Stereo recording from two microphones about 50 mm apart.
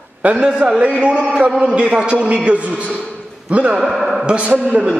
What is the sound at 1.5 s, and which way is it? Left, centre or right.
Speech, centre.